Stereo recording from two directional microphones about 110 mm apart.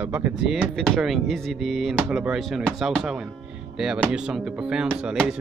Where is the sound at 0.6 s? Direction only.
5° left (ahead or behind).